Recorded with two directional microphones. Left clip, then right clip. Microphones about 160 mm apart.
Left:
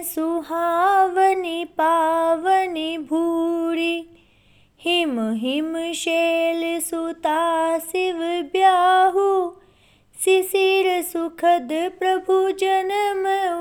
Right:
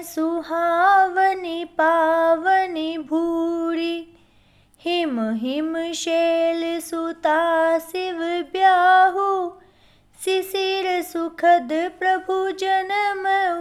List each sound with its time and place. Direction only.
0.0 s speech: 30° left (ahead or behind)